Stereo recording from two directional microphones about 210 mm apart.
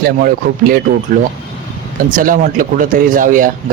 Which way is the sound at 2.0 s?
40° right (ahead or behind).